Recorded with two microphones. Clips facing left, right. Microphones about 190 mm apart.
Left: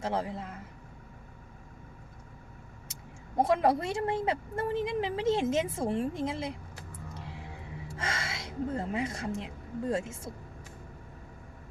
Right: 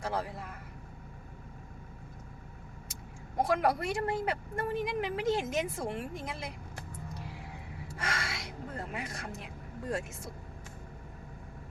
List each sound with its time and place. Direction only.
0.0 s speech: 25° left (ahead or behind)
2.9 s speech: 25° left (ahead or behind)
7.9 s speech: 25° left (ahead or behind)